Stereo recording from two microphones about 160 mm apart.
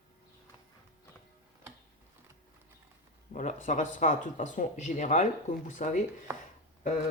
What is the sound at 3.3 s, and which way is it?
Speech, 55° left (ahead or behind).